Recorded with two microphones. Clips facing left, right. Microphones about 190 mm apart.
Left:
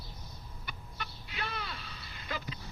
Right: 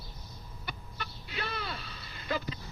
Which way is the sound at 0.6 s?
35° right (ahead or behind).